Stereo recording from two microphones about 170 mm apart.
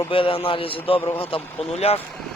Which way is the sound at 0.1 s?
30° left (ahead or behind).